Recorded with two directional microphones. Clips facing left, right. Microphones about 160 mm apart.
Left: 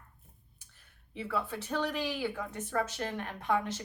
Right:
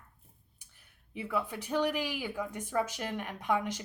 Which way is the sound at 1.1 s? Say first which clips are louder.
Right 1 dB; 15° right (ahead or behind).